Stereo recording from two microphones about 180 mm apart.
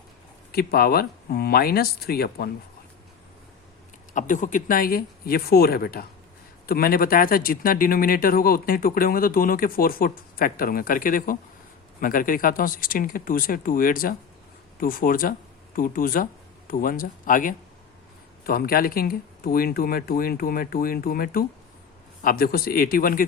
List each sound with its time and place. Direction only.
0.5 s speech: 55° left (ahead or behind)
4.1 s speech: 45° left (ahead or behind)